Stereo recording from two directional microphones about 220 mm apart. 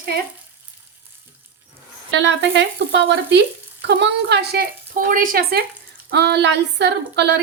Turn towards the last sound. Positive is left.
turn(degrees=-50)  # may be behind; listen again after turning